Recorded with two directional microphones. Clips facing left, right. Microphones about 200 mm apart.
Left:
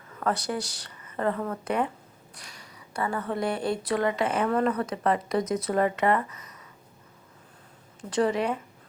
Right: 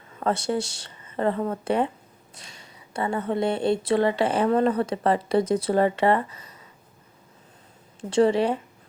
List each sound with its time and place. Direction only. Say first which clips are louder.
0.2 s speech: right 4 dB; 25° right (ahead or behind)
8.1 s speech: right 5 dB; 30° right (ahead or behind)